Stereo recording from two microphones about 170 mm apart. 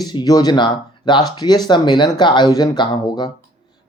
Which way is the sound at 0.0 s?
25° left (ahead or behind).